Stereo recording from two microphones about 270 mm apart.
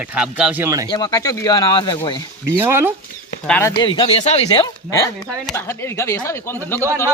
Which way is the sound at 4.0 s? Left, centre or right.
Left.